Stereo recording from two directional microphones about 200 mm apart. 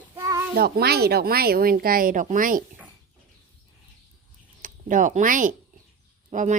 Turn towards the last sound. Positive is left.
turn(degrees=-35)  # may be behind; listen again after turning